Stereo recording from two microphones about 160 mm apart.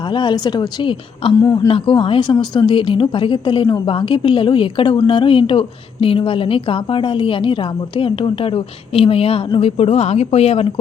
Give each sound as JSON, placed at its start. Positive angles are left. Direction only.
{"t": 0.0, "sound": "a woman's voice", "side_deg": 30}
{"t": 1.4, "sound": "a woman's voice", "side_deg": 20}
{"t": 1.7, "sound": "a woman's voice", "side_deg": 35}